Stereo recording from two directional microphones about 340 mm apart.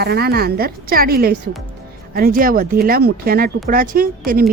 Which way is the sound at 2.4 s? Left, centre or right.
Right.